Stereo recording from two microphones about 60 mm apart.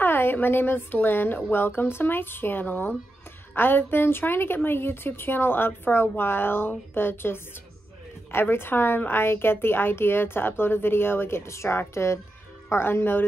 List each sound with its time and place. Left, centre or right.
0.0 s a woman's voice: left